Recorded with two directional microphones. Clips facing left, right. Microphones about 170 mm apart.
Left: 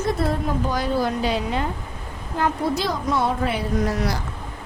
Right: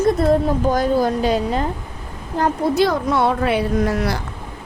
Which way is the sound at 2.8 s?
65° right (ahead or behind).